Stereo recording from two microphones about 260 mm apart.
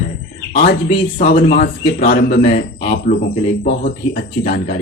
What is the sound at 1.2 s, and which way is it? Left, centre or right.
A man's voice, left.